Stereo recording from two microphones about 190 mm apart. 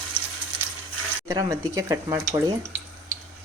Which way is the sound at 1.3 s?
15° right (ahead or behind).